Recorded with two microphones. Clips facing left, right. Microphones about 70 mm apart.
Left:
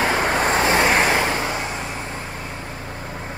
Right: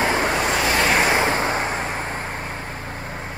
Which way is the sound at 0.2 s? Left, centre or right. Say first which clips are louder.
Left 2 dB; left.